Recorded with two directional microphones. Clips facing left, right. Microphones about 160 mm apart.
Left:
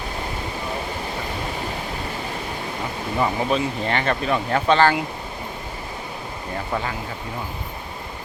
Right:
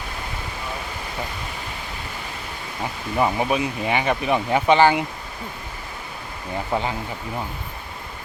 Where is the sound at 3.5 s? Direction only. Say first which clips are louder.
Even; 10° right (ahead or behind).